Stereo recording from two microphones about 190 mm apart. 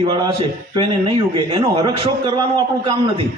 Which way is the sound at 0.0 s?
20° right (ahead or behind).